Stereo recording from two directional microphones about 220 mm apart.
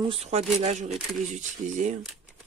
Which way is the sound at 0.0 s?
25° right (ahead or behind).